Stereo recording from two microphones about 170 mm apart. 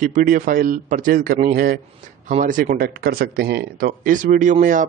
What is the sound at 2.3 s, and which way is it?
Speech, 50° right (ahead or behind).